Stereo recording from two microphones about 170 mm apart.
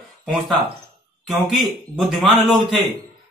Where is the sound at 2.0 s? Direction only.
Centre (ahead or behind).